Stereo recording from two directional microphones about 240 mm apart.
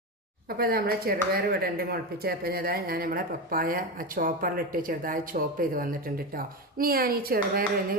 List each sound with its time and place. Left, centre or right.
0.4 s speech: right